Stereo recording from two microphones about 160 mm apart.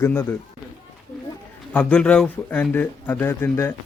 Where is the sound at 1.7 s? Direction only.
10° left (ahead or behind).